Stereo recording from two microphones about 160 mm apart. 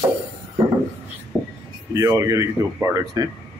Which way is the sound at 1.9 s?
20° right (ahead or behind).